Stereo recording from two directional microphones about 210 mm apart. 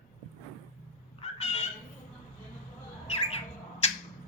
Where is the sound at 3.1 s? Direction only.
30° left (ahead or behind).